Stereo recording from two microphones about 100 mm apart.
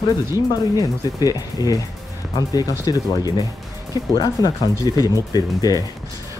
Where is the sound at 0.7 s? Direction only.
40° left (ahead or behind).